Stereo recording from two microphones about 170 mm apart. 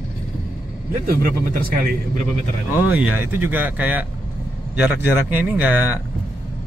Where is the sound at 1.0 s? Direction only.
55° right (ahead or behind).